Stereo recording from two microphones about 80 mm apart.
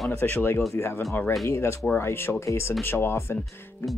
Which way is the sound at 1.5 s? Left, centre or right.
Left.